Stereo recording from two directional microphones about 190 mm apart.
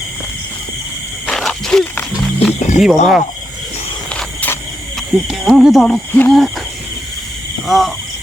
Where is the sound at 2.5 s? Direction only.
40° left (ahead or behind).